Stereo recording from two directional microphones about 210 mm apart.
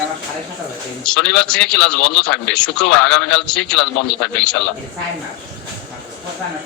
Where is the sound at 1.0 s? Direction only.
5° left (ahead or behind).